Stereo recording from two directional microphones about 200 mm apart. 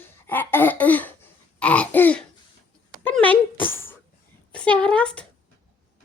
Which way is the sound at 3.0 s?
5° left (ahead or behind).